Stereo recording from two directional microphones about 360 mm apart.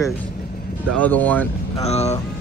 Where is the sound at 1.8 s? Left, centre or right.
Centre.